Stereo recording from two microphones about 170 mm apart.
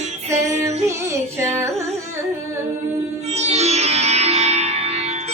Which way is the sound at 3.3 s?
40° right (ahead or behind).